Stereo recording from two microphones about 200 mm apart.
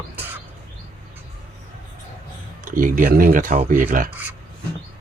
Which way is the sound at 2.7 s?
40° right (ahead or behind).